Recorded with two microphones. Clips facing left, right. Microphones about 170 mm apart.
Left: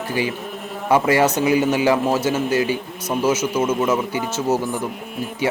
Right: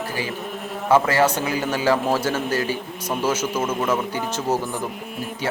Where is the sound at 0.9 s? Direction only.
15° left (ahead or behind).